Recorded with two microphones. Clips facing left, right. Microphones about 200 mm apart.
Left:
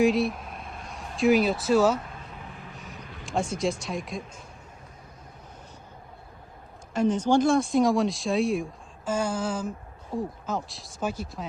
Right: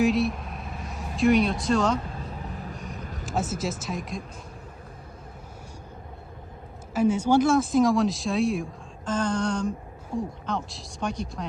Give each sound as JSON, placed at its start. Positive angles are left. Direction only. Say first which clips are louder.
{"t": 0.0, "sound": "vehicle", "louder": "even", "side_deg": 0}
{"t": 2.4, "sound": "vehicle", "louder": "right 6 dB", "side_deg": -40}
{"t": 2.7, "sound": "vehicle", "louder": "right 5 dB", "side_deg": 0}
{"t": 3.0, "sound": "vehicle", "louder": "right 5 dB", "side_deg": -45}
{"t": 3.2, "sound": "speech", "louder": "left 2 dB", "side_deg": -5}
{"t": 6.9, "sound": "speech", "louder": "right 1 dB", "side_deg": -10}